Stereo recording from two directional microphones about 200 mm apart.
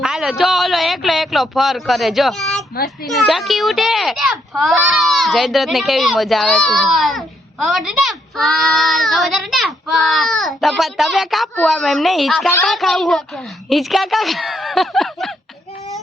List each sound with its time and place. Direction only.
0.0 s a man's voice: centre (ahead or behind)
2.7 s a child's voice: 50° left (ahead or behind)
3.1 s a child's voice: centre (ahead or behind)